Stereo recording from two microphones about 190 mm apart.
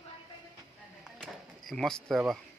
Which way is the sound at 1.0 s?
Centre (ahead or behind).